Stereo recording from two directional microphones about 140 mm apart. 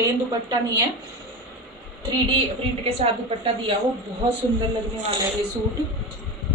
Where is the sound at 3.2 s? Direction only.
40° right (ahead or behind).